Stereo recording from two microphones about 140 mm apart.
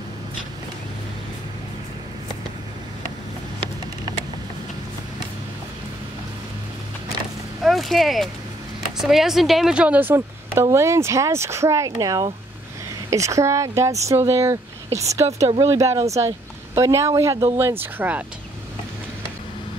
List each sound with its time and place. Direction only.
7.6 s a woman's voice: centre (ahead or behind)